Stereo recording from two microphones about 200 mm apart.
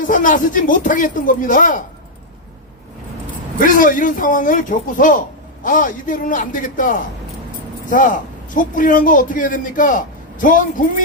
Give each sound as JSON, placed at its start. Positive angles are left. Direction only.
{"t": 0.0, "sound": "a man's voice", "side_deg": 40}
{"t": 3.6, "sound": "a man's voice", "side_deg": 40}